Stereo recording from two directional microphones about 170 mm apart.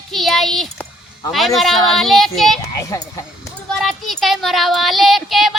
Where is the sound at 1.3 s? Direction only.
Centre (ahead or behind).